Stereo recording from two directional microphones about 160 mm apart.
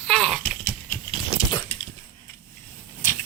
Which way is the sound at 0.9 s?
15° left (ahead or behind).